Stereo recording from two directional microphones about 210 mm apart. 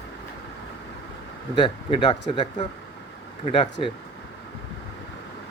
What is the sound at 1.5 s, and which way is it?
Speech, 20° left (ahead or behind).